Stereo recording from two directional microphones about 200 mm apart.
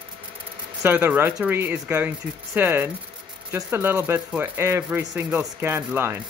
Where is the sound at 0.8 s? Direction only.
10° right (ahead or behind).